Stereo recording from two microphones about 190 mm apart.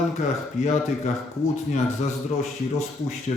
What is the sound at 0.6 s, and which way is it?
Speech, 35° left (ahead or behind).